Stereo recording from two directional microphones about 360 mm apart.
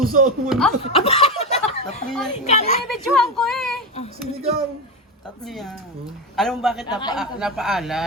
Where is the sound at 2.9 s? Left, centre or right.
Centre.